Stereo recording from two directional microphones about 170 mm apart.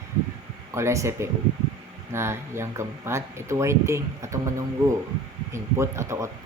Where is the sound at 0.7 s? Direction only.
15° right (ahead or behind).